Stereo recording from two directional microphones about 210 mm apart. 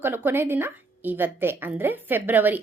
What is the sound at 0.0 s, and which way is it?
A woman's voice, 10° right (ahead or behind).